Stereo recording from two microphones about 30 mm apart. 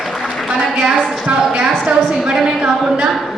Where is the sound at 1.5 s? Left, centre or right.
Right.